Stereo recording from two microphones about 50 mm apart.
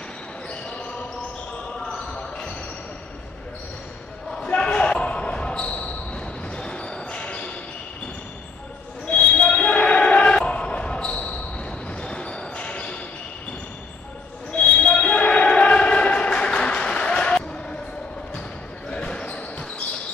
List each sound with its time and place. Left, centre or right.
0.5 s basketball bounce: left
2.1 s basketball bounce: centre
4.5 s basketball bounce: left
9.0 s basketball bounce: left
14.5 s basketball bounce: left
18.9 s basketball bounce: left